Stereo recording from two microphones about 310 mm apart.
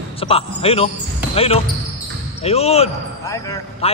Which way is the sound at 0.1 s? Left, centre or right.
Centre.